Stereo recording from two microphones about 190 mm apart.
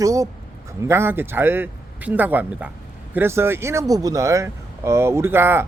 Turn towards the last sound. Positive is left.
turn(degrees=-10)  # may be behind; listen again after turning